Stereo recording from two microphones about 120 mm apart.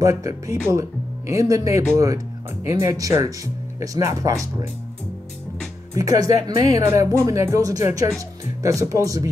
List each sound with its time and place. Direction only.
0.0 s speech: 25° right (ahead or behind)
5.9 s speech: 30° right (ahead or behind)